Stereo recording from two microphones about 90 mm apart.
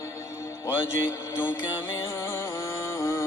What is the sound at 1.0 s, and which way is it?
Music, 25° left (ahead or behind).